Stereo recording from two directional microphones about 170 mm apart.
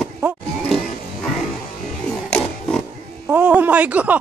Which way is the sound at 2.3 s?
5° left (ahead or behind).